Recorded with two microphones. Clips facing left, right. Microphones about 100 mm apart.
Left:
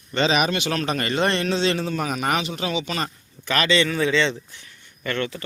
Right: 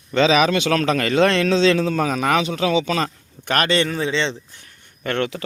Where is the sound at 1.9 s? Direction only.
90° right.